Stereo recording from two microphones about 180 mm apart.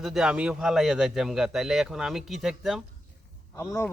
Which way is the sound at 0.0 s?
Centre (ahead or behind).